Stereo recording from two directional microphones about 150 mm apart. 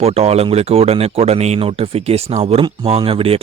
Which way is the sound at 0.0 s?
40° right (ahead or behind).